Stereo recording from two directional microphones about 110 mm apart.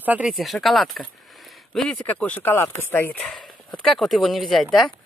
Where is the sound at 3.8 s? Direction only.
Centre (ahead or behind).